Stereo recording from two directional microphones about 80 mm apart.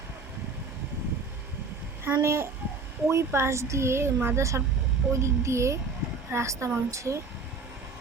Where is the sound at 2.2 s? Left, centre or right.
Right.